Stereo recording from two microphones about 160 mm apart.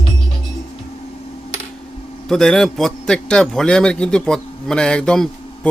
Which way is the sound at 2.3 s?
5° left (ahead or behind).